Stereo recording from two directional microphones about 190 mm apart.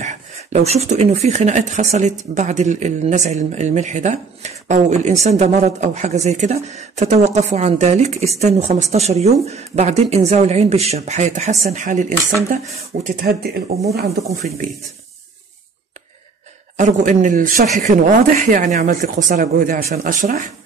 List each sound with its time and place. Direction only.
0.0 s speech: 40° right (ahead or behind)
16.7 s speech: 40° right (ahead or behind)